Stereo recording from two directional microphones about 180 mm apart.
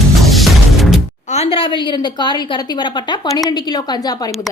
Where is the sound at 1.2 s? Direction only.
35° left (ahead or behind); by 4.3 s 20° left (ahead or behind).